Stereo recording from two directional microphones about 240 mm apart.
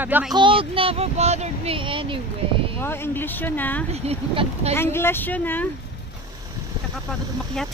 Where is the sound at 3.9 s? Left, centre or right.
Right.